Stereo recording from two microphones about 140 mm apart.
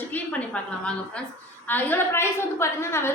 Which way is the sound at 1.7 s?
15° left (ahead or behind).